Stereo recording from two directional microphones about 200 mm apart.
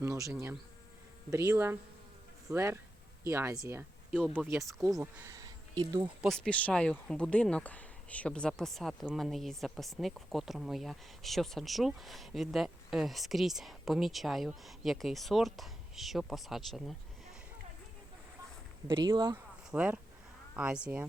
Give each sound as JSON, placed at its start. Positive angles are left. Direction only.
{"t": 0.0, "sound": "speech", "side_deg": -15}
{"t": 3.7, "sound": "a sound", "side_deg": -10}
{"t": 4.9, "sound": "speech", "side_deg": -15}
{"t": 6.2, "sound": "speech", "side_deg": 5}
{"t": 18.9, "sound": "speech", "side_deg": -20}
{"t": 19.7, "sound": "speech", "side_deg": -5}